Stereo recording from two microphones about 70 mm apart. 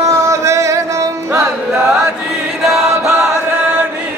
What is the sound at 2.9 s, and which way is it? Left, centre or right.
Chant, right.